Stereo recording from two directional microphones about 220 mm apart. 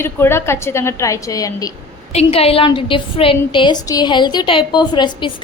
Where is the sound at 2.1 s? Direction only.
25° left (ahead or behind).